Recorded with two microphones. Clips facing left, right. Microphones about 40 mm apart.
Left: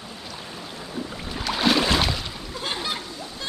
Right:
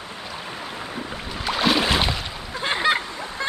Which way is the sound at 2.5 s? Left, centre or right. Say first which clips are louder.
Right 8 dB; right.